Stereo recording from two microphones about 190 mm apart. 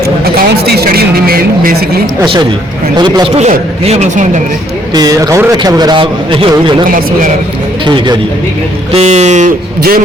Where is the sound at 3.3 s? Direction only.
35° right (ahead or behind).